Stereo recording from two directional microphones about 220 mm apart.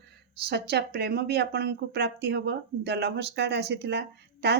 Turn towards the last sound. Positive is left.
turn(degrees=-50)  # may be behind; listen again after turning